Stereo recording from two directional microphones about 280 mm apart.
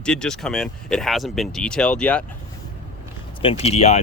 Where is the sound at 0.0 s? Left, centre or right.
Centre.